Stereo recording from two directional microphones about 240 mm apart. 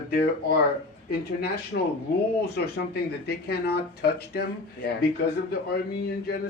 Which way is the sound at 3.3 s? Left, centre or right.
Left.